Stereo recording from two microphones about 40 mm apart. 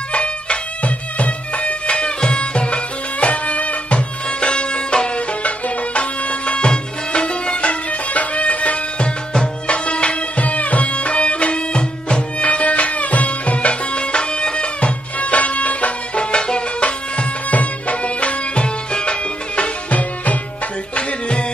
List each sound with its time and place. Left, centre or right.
0.1 s music: left
16.2 s music: left
16.8 s music: left
20.9 s music: left